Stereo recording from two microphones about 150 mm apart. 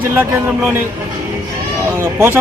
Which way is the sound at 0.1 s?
15° right (ahead or behind).